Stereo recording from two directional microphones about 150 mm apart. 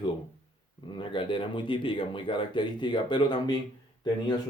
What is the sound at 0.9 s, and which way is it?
Speech, 35° left (ahead or behind).